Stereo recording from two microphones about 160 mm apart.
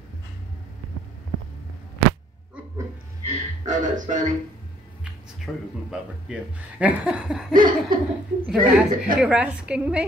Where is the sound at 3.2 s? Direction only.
55° right (ahead or behind).